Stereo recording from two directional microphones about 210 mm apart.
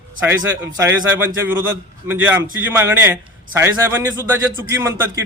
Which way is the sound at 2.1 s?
10° right (ahead or behind).